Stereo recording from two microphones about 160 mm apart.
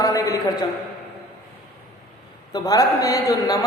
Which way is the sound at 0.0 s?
20° left (ahead or behind).